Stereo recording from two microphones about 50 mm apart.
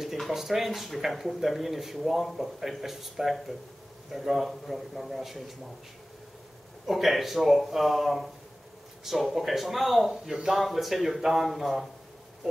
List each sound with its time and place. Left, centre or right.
0.3 s speech: centre
6.9 s speech: centre